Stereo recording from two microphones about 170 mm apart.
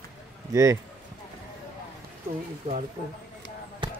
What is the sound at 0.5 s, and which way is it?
Speech, 20° right (ahead or behind).